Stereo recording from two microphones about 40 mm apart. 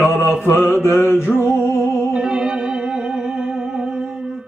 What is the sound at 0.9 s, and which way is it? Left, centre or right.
Music, left.